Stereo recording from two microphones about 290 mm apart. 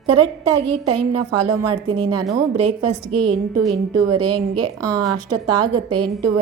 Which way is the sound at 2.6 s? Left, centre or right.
Right.